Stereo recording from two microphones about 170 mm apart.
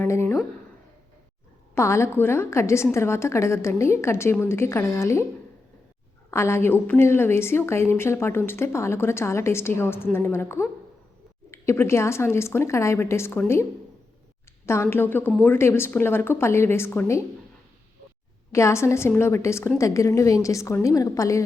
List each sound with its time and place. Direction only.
0.0 s a woman's voice: 15° left (ahead or behind)
1.7 s a woman's voice: 15° left (ahead or behind)
6.3 s a woman's voice: 15° left (ahead or behind)
14.7 s a woman's voice: 15° left (ahead or behind)
18.5 s a woman's voice: 15° left (ahead or behind)